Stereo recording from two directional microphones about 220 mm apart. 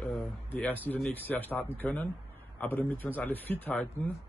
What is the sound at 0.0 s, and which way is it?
A man's voice, 5° left (ahead or behind).